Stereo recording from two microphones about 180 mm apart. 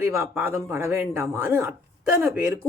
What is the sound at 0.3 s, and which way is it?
Speech, 15° right (ahead or behind).